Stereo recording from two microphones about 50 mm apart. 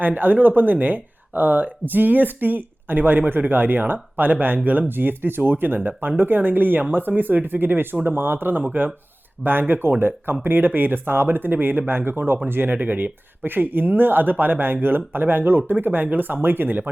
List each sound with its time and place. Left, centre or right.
0.0 s speech: right